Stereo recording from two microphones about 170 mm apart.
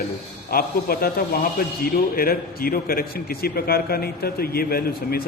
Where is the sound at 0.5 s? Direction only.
60° left (ahead or behind).